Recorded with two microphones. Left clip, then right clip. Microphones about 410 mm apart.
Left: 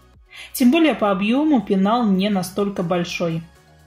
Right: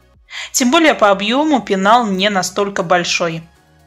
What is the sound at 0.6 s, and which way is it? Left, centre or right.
Speech, right.